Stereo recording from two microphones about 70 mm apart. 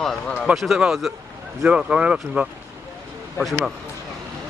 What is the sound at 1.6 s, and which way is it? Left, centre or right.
Speech, centre.